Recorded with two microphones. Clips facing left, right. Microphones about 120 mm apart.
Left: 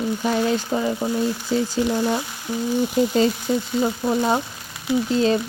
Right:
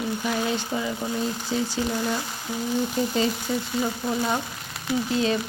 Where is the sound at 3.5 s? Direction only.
30° left (ahead or behind).